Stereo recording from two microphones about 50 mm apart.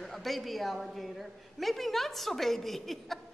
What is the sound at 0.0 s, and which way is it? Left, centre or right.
A woman's voice, centre.